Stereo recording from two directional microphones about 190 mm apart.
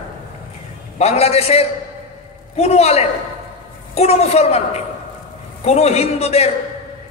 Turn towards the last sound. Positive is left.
turn(degrees=35)  # may be behind; listen again after turning